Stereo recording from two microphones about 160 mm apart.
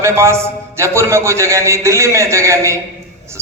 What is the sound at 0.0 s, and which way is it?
A man's voice, 15° right (ahead or behind).